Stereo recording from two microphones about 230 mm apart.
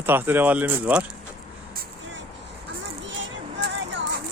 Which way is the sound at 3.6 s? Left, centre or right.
Right.